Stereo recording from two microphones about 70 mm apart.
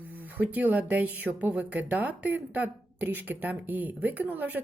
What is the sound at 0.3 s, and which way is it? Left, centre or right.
A woman's voice, right.